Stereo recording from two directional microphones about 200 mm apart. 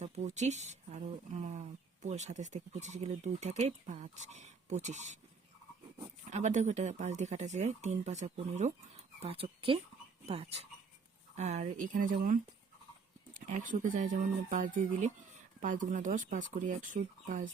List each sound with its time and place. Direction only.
0.0 s speech: 35° right (ahead or behind)
6.3 s speech: 35° right (ahead or behind)